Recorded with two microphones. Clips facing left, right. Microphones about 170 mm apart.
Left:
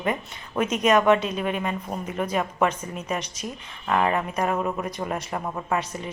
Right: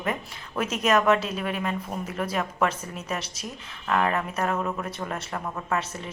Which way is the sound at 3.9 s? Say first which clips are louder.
Left 2 dB; 10° left (ahead or behind).